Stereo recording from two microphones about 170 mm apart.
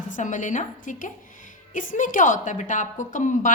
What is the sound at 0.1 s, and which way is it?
A woman's voice, 50° left (ahead or behind).